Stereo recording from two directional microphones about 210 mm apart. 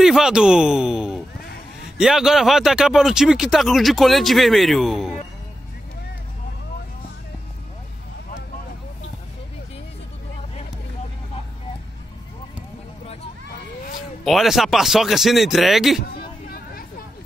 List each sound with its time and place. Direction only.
0.0 s speech: centre (ahead or behind)
14.2 s speech: centre (ahead or behind)
16.1 s chatter: 45° left (ahead or behind)